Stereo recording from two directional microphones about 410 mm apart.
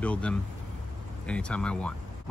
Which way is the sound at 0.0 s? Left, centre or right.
Centre.